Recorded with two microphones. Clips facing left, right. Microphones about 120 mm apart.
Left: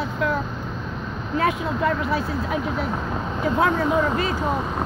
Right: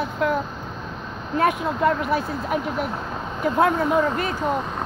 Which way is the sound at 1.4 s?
50° right (ahead or behind).